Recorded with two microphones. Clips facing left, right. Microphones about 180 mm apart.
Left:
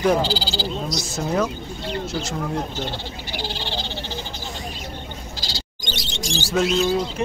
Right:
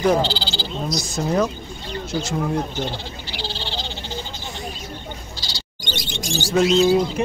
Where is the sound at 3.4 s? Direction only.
15° left (ahead or behind).